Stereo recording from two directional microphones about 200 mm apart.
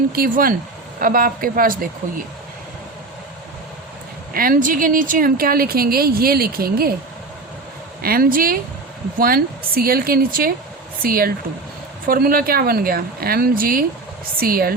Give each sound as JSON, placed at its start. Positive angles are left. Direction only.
{"t": 0.1, "sound": "speech", "side_deg": -45}
{"t": 4.4, "sound": "speech", "side_deg": -45}
{"t": 8.0, "sound": "speech", "side_deg": -45}